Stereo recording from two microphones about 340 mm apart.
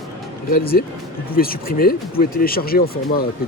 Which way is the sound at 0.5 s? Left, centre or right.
Left.